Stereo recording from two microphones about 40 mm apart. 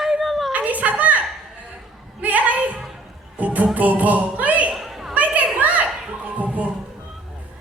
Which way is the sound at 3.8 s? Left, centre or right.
Right.